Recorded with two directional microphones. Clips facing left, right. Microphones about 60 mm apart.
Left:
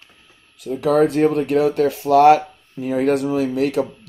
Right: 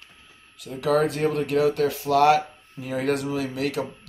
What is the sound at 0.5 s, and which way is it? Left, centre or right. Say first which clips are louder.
Speech: left 6 dB; left.